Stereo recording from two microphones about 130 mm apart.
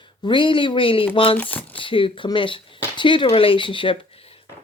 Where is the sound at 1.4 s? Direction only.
15° left (ahead or behind).